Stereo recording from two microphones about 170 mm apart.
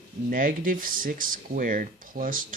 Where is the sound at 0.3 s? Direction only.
55° right (ahead or behind).